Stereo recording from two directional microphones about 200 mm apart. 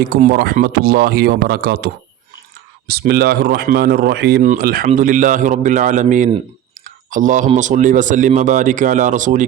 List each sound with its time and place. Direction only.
0.2 s speech: 45° right (ahead or behind)